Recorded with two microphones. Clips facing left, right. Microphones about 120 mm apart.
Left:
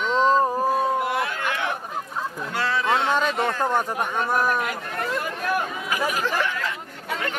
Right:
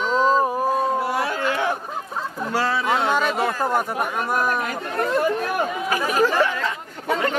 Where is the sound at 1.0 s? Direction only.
35° right (ahead or behind).